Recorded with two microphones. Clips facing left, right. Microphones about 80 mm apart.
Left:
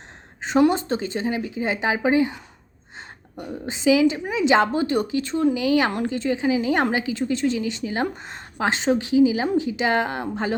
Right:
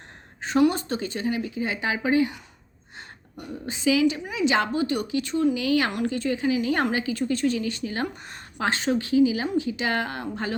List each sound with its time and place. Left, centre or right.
0.4 s speech: left